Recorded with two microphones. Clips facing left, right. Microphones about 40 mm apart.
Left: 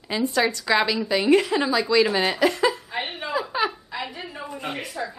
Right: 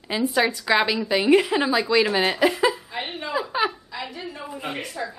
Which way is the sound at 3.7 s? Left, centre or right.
Centre.